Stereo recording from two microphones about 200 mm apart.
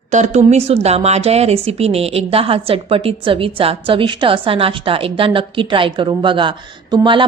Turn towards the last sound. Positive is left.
turn(degrees=-25)  # may be behind; listen again after turning